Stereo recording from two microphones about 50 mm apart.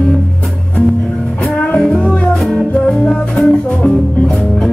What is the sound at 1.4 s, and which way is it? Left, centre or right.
Music, left.